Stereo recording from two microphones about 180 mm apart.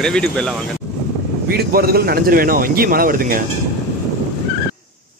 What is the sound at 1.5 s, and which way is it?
Speech, 60° right (ahead or behind).